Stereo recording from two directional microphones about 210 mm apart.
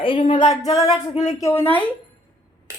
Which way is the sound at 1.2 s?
15° left (ahead or behind).